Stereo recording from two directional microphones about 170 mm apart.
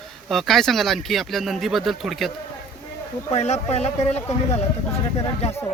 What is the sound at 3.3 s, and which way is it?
Speech, 40° left (ahead or behind).